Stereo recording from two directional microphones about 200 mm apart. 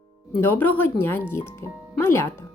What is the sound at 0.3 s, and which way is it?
Speech, 10° left (ahead or behind).